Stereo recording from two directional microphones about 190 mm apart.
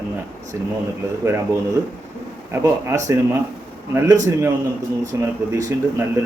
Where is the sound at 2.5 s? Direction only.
15° right (ahead or behind).